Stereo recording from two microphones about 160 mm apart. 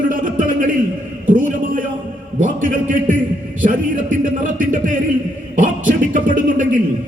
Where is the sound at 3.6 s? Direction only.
55° right (ahead or behind).